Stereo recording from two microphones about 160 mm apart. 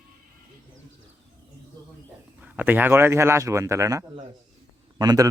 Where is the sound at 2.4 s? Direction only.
10° right (ahead or behind).